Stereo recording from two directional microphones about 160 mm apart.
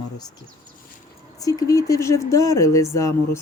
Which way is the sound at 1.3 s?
20° left (ahead or behind).